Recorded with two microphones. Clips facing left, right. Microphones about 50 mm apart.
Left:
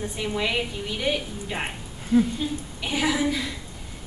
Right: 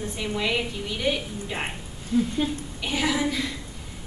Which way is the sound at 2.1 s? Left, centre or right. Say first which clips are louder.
Left 4 dB; centre.